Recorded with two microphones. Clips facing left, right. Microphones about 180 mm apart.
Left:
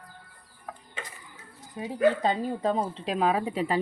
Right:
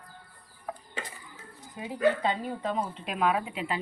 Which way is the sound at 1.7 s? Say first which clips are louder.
Left 2 dB; 35° left (ahead or behind).